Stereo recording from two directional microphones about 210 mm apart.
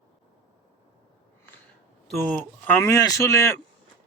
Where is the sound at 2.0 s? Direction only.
Centre (ahead or behind).